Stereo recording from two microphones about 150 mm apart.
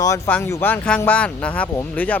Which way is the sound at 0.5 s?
10° left (ahead or behind).